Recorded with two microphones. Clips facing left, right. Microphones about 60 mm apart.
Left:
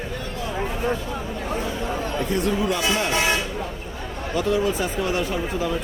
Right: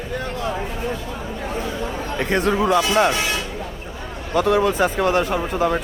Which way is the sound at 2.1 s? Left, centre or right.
Right.